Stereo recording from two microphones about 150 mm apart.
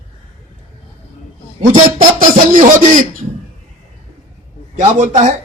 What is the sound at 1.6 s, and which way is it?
Speech, 60° right (ahead or behind).